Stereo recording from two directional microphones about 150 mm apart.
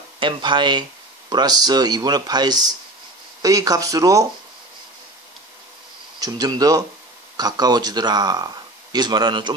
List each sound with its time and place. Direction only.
0.2 s speech: 35° right (ahead or behind)
6.1 s speech: 25° right (ahead or behind)